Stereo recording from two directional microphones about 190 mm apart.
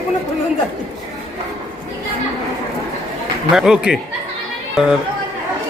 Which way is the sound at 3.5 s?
5° right (ahead or behind).